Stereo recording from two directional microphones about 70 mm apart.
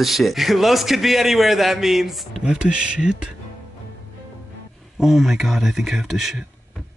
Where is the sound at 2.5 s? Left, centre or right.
Centre.